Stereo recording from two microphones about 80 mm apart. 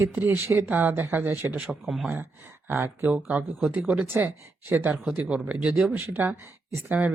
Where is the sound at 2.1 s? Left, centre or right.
Right.